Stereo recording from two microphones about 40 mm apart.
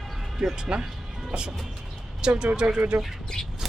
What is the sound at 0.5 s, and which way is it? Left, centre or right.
Speech, right.